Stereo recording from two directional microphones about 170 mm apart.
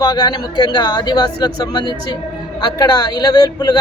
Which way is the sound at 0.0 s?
25° left (ahead or behind).